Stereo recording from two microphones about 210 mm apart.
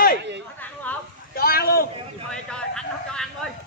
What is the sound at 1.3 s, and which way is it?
Speech, 45° left (ahead or behind).